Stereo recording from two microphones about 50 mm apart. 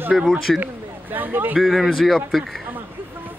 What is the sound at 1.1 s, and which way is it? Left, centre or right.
Speech, right.